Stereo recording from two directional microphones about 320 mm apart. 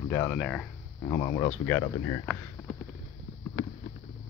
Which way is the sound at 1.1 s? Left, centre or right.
Centre.